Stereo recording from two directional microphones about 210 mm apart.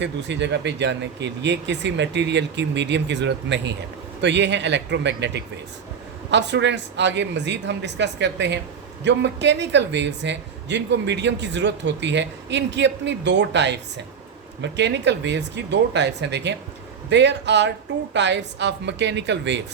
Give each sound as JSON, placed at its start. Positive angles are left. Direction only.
{"t": 0.0, "sound": "speech", "side_deg": -55}